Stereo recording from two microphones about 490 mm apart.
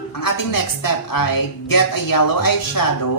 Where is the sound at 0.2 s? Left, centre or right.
Left.